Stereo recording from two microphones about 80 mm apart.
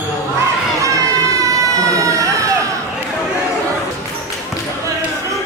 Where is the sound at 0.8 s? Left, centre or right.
Right.